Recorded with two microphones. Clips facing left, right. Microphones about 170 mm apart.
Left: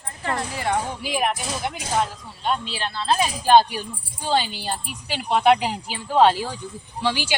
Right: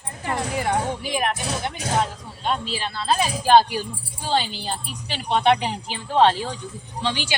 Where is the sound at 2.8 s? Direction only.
Centre (ahead or behind).